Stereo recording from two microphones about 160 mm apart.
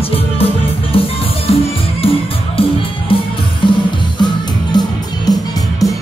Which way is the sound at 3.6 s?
30° left (ahead or behind).